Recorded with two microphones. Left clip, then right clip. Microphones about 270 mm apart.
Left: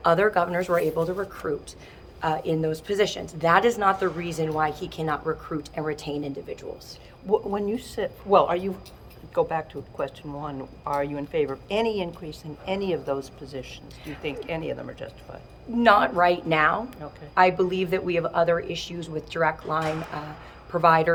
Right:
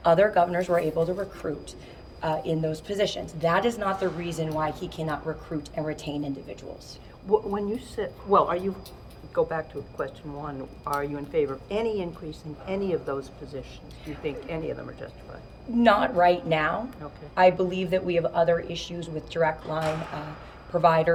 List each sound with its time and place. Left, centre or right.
0.0 s a woman's voice: centre
7.3 s speech: left
15.8 s a woman's voice: centre